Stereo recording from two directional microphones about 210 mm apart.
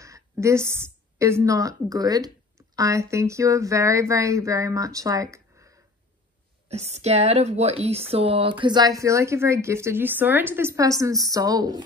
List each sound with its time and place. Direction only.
0.0 s a woman's voice: 15° right (ahead or behind)
6.7 s speech: 30° right (ahead or behind)